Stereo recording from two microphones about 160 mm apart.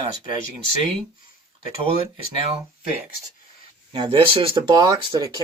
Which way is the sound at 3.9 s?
30° right (ahead or behind).